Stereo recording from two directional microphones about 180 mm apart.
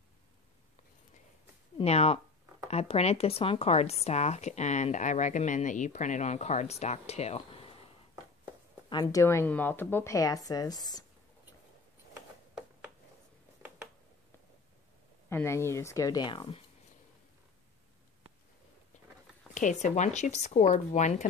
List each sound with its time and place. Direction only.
1.8 s a woman's voice: 35° left (ahead or behind)
8.8 s a woman's voice: 20° left (ahead or behind)
15.2 s speech: 15° left (ahead or behind)
19.5 s a woman's voice: 40° left (ahead or behind)